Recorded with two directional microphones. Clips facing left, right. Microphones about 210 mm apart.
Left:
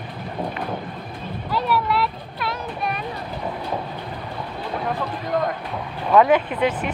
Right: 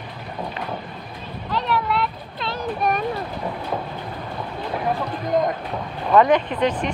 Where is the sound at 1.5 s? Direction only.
5° left (ahead or behind).